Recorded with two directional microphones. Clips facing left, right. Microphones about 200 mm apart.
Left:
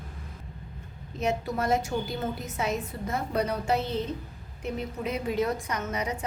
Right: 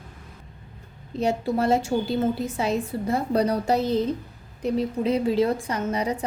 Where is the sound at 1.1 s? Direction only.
30° right (ahead or behind).